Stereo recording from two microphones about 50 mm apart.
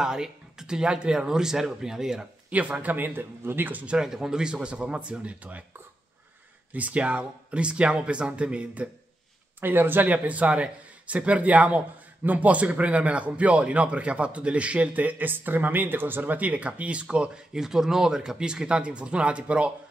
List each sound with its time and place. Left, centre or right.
0.0 s speech: centre
2.5 s speech: right
3.8 s speech: centre
6.7 s speech: right
9.6 s speech: right
10.0 s speech: right